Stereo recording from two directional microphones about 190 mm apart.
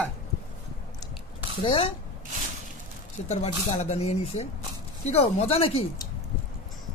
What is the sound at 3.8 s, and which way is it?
Speech, 35° left (ahead or behind).